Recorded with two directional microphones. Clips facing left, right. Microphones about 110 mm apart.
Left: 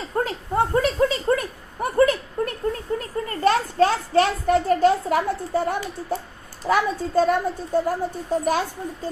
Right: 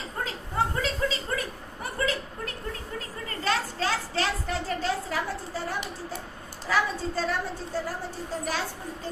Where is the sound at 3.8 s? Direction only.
50° left (ahead or behind).